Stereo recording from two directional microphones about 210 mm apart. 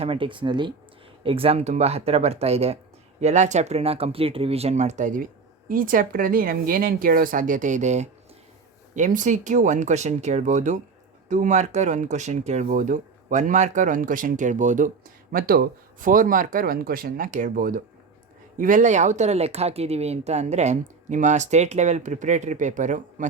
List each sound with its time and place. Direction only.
0.0 s speech: 25° right (ahead or behind)